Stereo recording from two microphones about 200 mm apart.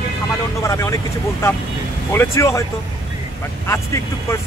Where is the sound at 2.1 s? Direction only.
10° left (ahead or behind).